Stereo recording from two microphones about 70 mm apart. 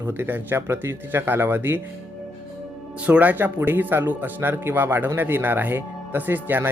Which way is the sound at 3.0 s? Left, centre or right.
Right.